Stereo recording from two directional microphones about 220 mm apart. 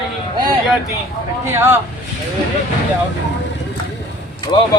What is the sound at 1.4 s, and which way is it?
Speech, 10° right (ahead or behind).